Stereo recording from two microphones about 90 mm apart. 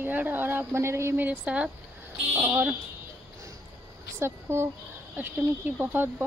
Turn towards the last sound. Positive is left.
turn(degrees=-20)  # may be behind; listen again after turning